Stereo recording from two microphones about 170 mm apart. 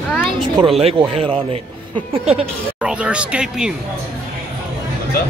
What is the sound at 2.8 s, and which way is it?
Speech, 5° right (ahead or behind).